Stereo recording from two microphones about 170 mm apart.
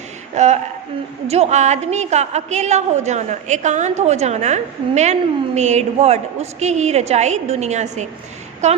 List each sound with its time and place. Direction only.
0.3 s a woman's voice: 40° right (ahead or behind)